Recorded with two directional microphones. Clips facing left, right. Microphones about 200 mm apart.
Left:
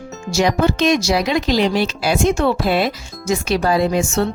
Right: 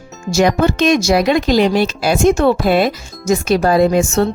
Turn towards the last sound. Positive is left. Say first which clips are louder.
# right 5 dB
turn(degrees=-45)  # may be behind; listen again after turning